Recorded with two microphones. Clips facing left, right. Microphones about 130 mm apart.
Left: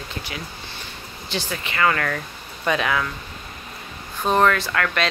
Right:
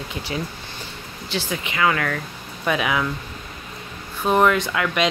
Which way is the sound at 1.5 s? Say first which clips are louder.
Even; 15° right (ahead or behind).